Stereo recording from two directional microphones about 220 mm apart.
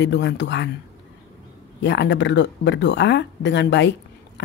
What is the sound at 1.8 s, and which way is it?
Speech, 55° left (ahead or behind).